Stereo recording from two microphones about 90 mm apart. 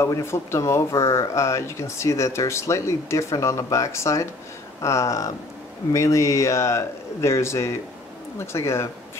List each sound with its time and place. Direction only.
0.0 s speech: 30° left (ahead or behind)